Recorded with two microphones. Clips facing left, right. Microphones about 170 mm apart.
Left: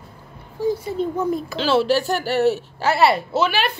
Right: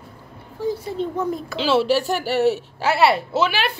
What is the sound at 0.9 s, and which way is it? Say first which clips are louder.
Speech: left 2 dB; 5° left (ahead or behind).